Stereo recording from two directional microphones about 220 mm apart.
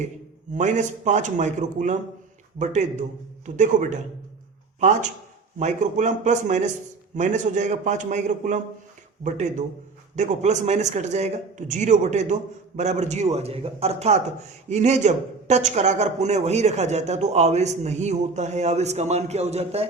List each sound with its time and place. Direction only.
0.5 s a woman's voice: 35° right (ahead or behind)